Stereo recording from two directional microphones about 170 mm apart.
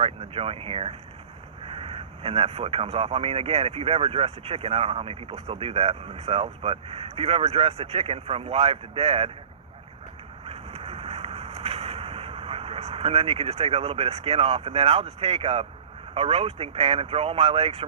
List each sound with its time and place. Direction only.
0.0 s speech: 35° right (ahead or behind)
10.4 s vehicle: 35° right (ahead or behind)
16.1 s speech: 35° right (ahead or behind)